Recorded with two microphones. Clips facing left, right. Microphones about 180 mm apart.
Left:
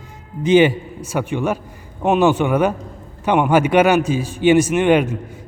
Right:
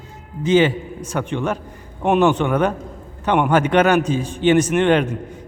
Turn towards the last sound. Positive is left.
turn(degrees=10)  # may be behind; listen again after turning